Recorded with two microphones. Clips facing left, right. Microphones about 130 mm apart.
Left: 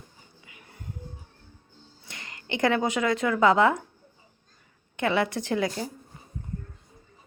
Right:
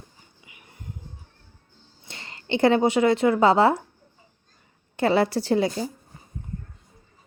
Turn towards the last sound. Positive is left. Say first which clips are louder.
# right 5 dB
turn(degrees=-25)  # may be behind; listen again after turning